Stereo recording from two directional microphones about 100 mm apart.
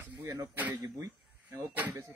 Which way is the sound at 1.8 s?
20° right (ahead or behind).